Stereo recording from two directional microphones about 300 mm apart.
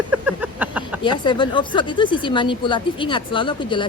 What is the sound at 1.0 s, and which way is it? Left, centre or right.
Speech, centre.